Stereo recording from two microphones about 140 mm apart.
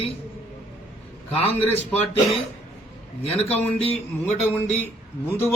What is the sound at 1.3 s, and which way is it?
Speech, 40° left (ahead or behind).